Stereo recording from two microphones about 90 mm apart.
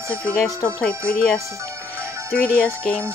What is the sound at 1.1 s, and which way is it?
Speech, 10° left (ahead or behind).